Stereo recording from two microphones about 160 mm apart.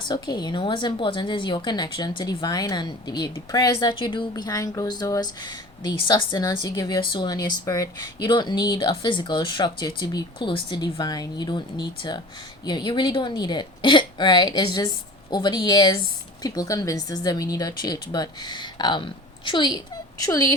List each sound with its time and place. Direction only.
0.1 s a woman's voice: 25° left (ahead or behind)